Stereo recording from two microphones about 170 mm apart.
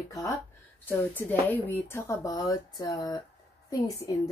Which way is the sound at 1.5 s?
15° left (ahead or behind).